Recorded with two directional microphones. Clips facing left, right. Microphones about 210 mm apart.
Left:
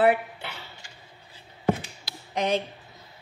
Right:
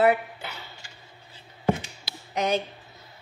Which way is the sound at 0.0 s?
30° left (ahead or behind).